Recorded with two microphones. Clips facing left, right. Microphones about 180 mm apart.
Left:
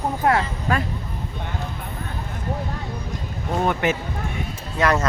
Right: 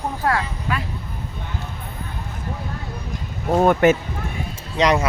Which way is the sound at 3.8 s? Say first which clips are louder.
Right 9 dB; 50° right (ahead or behind).